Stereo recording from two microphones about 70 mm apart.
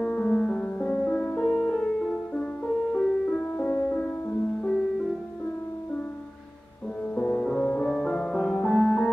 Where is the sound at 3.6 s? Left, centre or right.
Left.